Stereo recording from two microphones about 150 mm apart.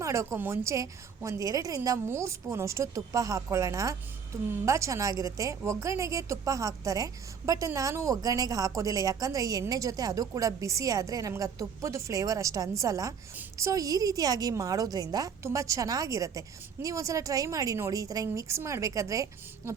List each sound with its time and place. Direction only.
0.0 s a woman's voice: 20° right (ahead or behind)